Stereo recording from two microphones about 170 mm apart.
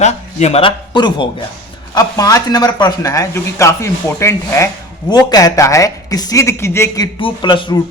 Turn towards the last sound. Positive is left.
turn(degrees=30)  # may be behind; listen again after turning